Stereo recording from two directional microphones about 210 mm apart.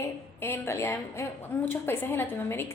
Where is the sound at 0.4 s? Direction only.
10° left (ahead or behind).